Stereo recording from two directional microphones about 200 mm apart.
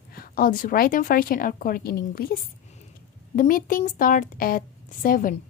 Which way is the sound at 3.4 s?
45° left (ahead or behind).